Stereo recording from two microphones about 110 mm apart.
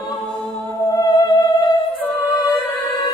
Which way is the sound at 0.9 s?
35° left (ahead or behind).